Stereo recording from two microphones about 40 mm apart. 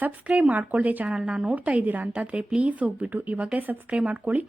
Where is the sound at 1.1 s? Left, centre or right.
Right.